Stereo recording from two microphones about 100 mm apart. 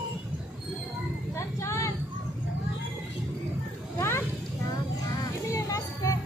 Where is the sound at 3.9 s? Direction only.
25° left (ahead or behind).